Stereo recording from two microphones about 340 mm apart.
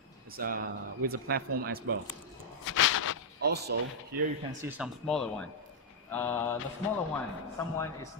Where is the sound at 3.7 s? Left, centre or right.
Right.